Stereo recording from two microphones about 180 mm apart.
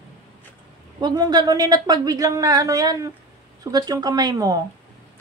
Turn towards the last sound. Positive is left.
turn(degrees=-20)  # may be behind; listen again after turning